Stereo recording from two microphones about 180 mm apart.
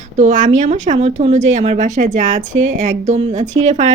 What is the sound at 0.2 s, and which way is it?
A woman's voice, 45° right (ahead or behind).